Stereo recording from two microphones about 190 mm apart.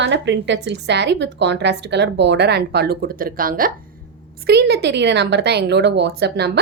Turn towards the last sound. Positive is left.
turn(degrees=-60)  # may be behind; listen again after turning